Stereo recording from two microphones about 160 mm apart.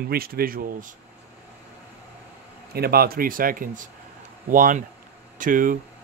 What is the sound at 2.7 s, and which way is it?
Speech, 75° right (ahead or behind).